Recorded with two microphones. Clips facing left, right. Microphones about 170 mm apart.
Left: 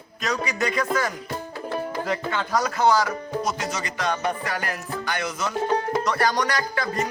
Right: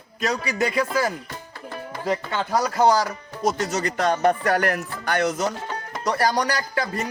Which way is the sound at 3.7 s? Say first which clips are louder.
Right 5 dB; 45° right (ahead or behind).